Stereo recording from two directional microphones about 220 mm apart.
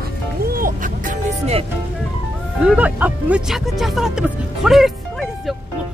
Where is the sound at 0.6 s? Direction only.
40° right (ahead or behind).